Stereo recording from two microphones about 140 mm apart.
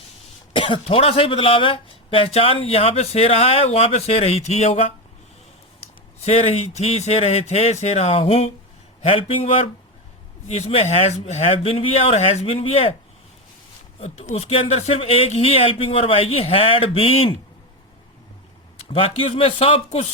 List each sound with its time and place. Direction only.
0.5 s speech: 35° left (ahead or behind); by 4.9 s 55° left (ahead or behind)
6.2 s speech: 50° left (ahead or behind)
14.0 s speech: 45° left (ahead or behind)
18.9 s speech: 40° left (ahead or behind)